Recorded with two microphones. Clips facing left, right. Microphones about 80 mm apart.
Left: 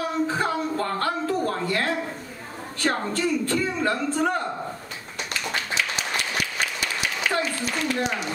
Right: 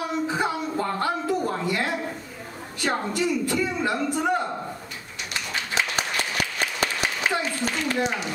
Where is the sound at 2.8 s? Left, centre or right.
Centre.